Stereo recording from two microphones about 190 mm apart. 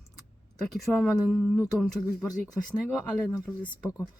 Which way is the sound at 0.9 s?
10° left (ahead or behind).